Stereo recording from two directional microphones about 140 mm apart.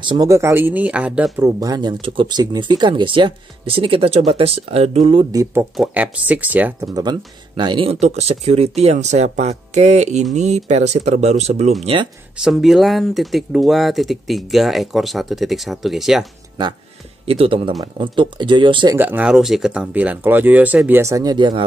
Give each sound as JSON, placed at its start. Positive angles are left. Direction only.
{"t": 0.0, "sound": "speech", "side_deg": -35}
{"t": 0.3, "sound": "speech", "side_deg": -20}
{"t": 1.3, "sound": "speech", "side_deg": -25}
{"t": 5.3, "sound": "speech", "side_deg": -20}
{"t": 5.8, "sound": "speech", "side_deg": -10}
{"t": 6.8, "sound": "speech", "side_deg": -25}
{"t": 12.4, "sound": "speech", "side_deg": -5}
{"t": 17.3, "sound": "speech", "side_deg": -45}
{"t": 18.9, "sound": "speech", "side_deg": -15}